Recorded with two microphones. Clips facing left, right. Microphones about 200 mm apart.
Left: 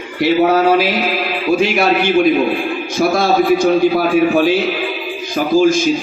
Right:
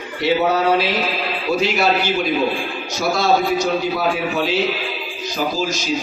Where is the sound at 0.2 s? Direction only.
55° left (ahead or behind).